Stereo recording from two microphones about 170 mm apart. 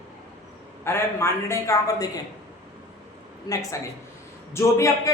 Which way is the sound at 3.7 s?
15° left (ahead or behind).